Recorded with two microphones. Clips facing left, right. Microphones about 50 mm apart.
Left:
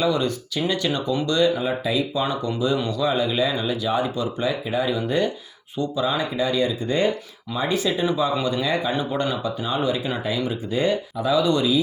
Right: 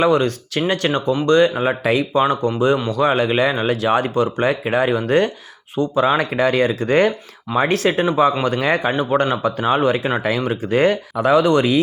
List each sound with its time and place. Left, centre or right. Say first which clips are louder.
0.0 s speech: right 6 dB; right
2.2 s speech: right 7 dB; right
8.0 s speech: right 5 dB; right